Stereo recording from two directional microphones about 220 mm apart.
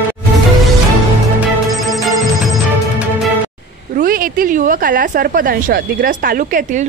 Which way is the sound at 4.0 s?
40° right (ahead or behind).